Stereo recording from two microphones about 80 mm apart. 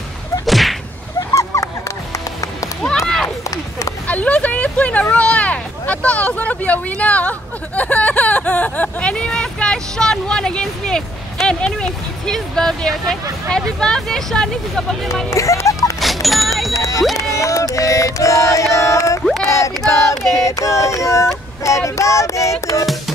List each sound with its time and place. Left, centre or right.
0.5 s whip: centre
1.3 s music: left
4.1 s vehicle: centre
5.1 s speech: centre
15.2 s music: left
16.0 s music: centre
16.7 s a sound: left
17.3 s music: left